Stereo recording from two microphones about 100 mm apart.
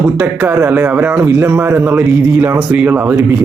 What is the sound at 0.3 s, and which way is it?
Speech, 25° right (ahead or behind).